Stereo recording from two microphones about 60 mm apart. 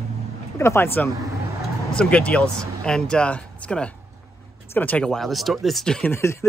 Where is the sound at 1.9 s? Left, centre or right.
Centre.